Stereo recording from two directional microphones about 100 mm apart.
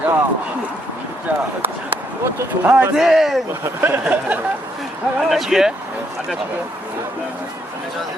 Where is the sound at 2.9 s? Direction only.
5° right (ahead or behind).